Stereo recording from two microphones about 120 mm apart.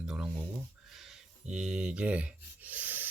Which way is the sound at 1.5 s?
5° right (ahead or behind).